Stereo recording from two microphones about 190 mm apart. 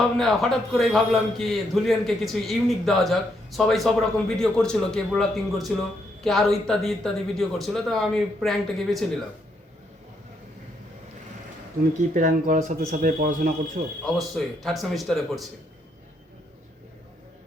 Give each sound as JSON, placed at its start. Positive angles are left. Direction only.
{"t": 0.2, "sound": "a man's voice", "side_deg": 0}
{"t": 12.1, "sound": "speech", "side_deg": -45}
{"t": 14.0, "sound": "a man's voice", "side_deg": 0}